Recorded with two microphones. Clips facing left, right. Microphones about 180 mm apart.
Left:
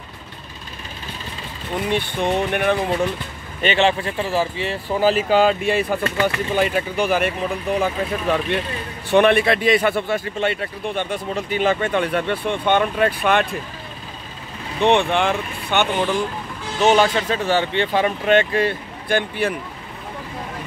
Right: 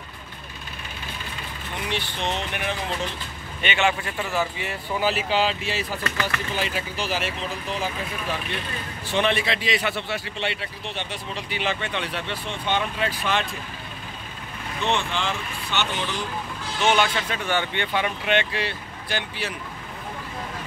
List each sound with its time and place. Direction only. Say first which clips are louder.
1.9 s speech: left 7 dB; 55° left (ahead or behind)
3.6 s a man's voice: left 6 dB; 35° left (ahead or behind); by 13.6 s 60° left (ahead or behind)
14.8 s speech: left 9 dB; 60° left (ahead or behind)
16.8 s speech: left 6 dB; 40° left (ahead or behind)